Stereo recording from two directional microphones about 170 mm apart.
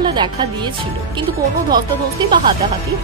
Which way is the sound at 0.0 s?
25° right (ahead or behind).